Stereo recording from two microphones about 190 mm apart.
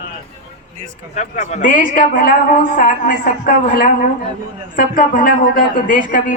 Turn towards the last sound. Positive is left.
turn(degrees=40)  # may be behind; listen again after turning